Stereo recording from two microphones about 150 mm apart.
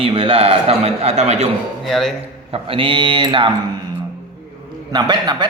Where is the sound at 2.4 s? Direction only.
40° right (ahead or behind).